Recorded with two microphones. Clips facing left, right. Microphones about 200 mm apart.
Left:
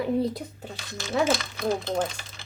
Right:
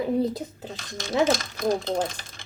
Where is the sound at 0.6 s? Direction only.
40° right (ahead or behind).